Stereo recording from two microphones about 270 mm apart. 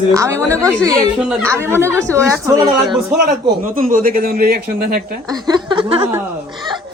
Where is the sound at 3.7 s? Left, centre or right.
Right.